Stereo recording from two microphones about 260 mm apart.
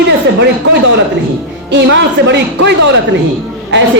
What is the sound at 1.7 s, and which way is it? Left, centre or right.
Speech, right.